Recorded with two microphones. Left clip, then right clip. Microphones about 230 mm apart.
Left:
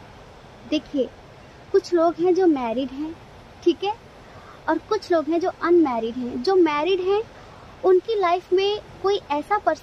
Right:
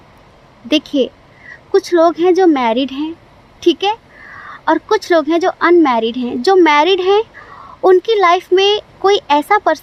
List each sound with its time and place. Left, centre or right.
0.7 s a woman's voice: right